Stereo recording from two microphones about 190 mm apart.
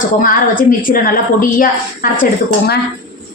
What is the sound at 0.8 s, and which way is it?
A woman's voice, 50° left (ahead or behind).